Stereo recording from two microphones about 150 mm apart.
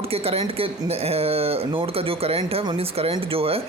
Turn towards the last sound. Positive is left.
turn(degrees=-40)  # may be behind; listen again after turning